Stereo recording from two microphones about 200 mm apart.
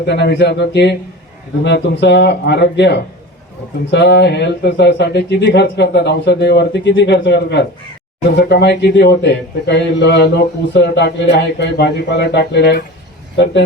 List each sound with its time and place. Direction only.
0.0 s a man's voice: 55° left (ahead or behind)